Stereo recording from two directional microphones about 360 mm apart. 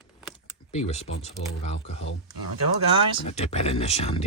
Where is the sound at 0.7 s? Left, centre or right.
Centre.